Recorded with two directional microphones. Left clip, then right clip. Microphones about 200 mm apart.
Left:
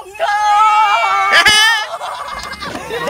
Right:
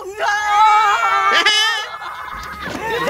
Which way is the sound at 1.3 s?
10° right (ahead or behind).